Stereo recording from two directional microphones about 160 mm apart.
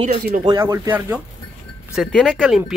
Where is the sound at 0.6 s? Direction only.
15° right (ahead or behind).